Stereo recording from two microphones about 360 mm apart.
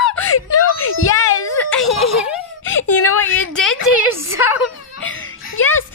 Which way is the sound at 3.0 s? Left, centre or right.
Left.